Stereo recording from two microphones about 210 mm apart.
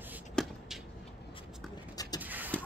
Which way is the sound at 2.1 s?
10° right (ahead or behind).